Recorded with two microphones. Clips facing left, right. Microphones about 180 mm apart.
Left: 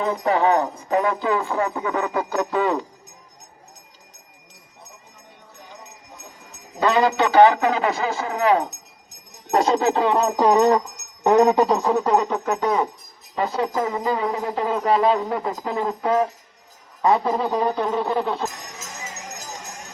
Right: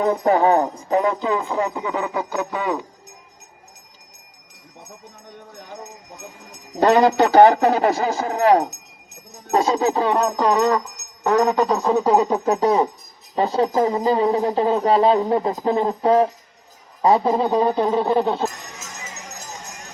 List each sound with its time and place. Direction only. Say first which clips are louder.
0.3 s speech: right 2 dB; 40° right (ahead or behind)
0.9 s speech: even; 25° right (ahead or behind); by 2.8 s 5° right (ahead or behind)
6.7 s speech: right 4 dB; 45° right (ahead or behind)
9.6 s a sound: even; 10° right (ahead or behind)
10.5 s speech: left 2 dB; 20° left (ahead or behind)
11.9 s a sound: right 2 dB; centre (ahead or behind)
12.2 s speech: right 4 dB; 30° right (ahead or behind)